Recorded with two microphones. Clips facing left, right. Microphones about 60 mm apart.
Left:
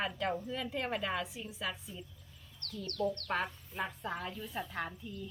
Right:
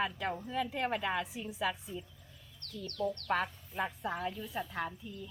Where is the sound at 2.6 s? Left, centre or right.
Left.